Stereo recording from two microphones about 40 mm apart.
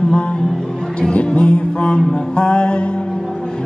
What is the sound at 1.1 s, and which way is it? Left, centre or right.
Music, left.